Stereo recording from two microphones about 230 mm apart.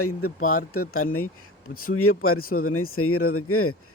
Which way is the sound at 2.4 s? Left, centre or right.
Left.